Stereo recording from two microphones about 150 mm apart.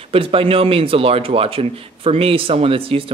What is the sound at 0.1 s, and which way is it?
Speech, 40° right (ahead or behind).